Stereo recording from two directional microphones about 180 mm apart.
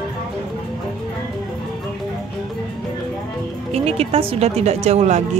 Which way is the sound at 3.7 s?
35° right (ahead or behind).